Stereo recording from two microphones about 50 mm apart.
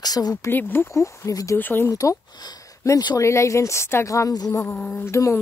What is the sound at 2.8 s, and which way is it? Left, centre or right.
Speech, left.